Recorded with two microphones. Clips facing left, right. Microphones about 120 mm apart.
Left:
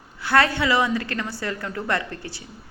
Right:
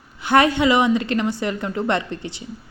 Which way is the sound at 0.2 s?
20° right (ahead or behind).